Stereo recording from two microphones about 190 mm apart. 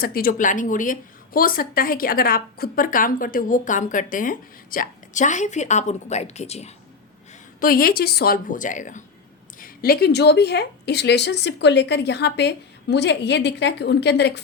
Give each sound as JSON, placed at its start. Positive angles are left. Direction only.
{"t": 0.0, "sound": "a woman's voice", "side_deg": 50}
{"t": 7.6, "sound": "a woman's voice", "side_deg": 50}